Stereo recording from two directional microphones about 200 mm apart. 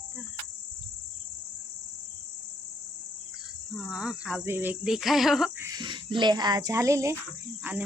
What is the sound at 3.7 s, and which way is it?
Speech, centre (ahead or behind).